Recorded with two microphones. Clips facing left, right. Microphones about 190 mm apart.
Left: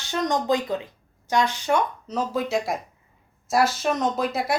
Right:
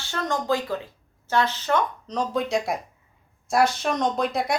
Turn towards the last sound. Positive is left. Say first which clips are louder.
# even
turn(degrees=5)  # may be behind; listen again after turning